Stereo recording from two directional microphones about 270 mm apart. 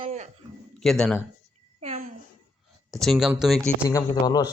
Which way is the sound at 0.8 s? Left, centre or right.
Centre.